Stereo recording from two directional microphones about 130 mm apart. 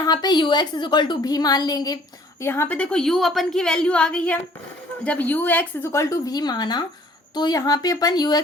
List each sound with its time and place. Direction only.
0.0 s a woman's voice: 30° left (ahead or behind)
2.4 s a woman's voice: 20° left (ahead or behind)